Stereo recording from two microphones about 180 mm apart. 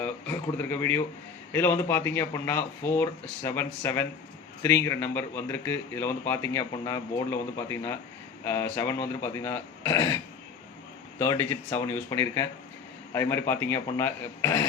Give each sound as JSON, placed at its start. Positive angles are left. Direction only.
{"t": 0.0, "sound": "speech", "side_deg": 10}
{"t": 11.2, "sound": "speech", "side_deg": 15}